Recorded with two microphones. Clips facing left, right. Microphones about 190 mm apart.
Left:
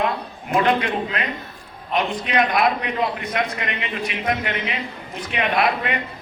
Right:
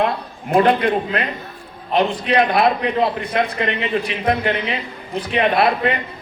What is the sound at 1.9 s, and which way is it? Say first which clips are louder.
A man's voice: right 5 dB; 30° right (ahead or behind).